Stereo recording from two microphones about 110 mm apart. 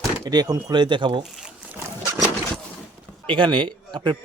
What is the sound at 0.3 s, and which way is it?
Speech, 35° right (ahead or behind).